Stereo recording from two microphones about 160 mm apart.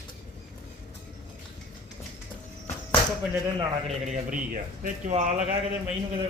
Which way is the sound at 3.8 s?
50° right (ahead or behind).